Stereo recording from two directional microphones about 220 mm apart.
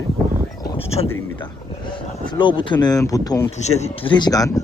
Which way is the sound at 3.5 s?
30° left (ahead or behind).